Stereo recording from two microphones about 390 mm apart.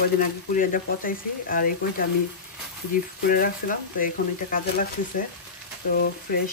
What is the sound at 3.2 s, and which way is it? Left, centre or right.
Speech, left.